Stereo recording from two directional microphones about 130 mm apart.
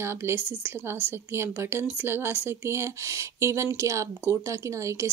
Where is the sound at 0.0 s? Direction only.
20° right (ahead or behind).